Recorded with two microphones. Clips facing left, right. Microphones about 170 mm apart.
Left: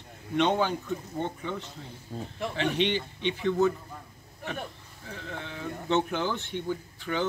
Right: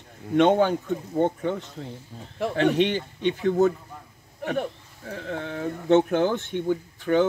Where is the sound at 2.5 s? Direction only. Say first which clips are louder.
Right 6 dB; 50° right (ahead or behind).